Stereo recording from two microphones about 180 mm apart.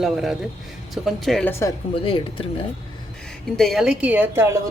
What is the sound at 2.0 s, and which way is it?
Speech, 30° left (ahead or behind).